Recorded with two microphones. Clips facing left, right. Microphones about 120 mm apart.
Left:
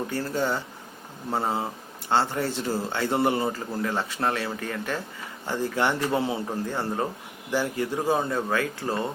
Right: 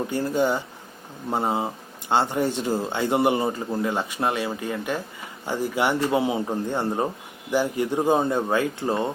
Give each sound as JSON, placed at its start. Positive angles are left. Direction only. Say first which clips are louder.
{"t": 0.1, "sound": "speech", "louder": "right 6 dB", "side_deg": -15}